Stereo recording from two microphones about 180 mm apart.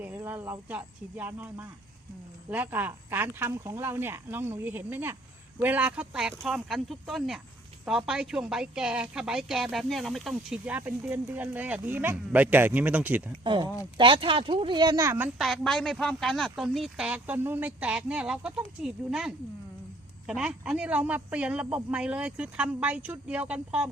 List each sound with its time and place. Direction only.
0.0 s a man's voice: 10° right (ahead or behind)
13.4 s speech: 25° right (ahead or behind)
15.4 s a woman's voice: centre (ahead or behind)